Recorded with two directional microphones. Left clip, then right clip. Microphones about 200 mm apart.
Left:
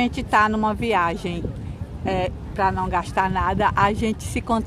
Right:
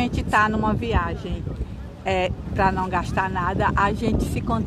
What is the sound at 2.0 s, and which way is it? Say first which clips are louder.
Speech: right 1 dB; centre (ahead or behind).